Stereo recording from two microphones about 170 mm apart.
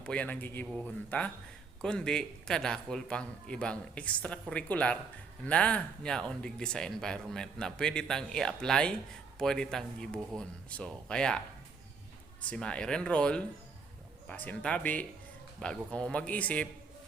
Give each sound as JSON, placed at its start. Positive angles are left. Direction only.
{"t": 0.0, "sound": "a man's voice", "side_deg": 5}
{"t": 12.5, "sound": "a man's voice", "side_deg": 5}